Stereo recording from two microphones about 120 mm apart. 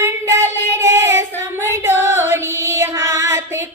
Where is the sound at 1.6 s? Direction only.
20° right (ahead or behind).